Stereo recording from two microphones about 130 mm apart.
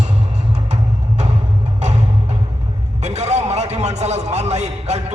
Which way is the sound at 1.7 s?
60° right (ahead or behind).